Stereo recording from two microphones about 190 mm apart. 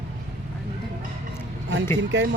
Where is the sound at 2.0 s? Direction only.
75° right (ahead or behind).